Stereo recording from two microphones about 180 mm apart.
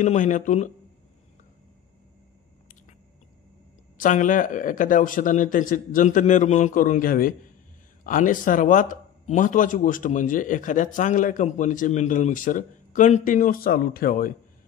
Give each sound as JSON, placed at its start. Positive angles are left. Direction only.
{"t": 0.0, "sound": "a man's voice", "side_deg": 45}
{"t": 4.0, "sound": "a man's voice", "side_deg": 45}